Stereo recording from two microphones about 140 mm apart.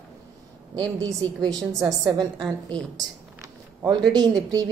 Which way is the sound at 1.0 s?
25° right (ahead or behind).